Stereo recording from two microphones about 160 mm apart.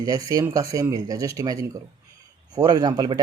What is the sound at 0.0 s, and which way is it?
Speech, 20° right (ahead or behind).